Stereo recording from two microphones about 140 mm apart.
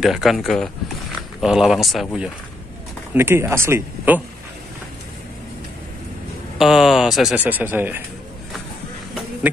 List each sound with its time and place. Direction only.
0.0 s speech: centre (ahead or behind)
3.2 s speech: 15° right (ahead or behind)
6.6 s speech: centre (ahead or behind)
7.3 s speech: 10° right (ahead or behind)